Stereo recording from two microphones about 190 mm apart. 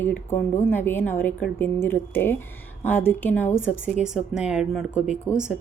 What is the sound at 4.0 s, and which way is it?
A woman's voice, 5° right (ahead or behind).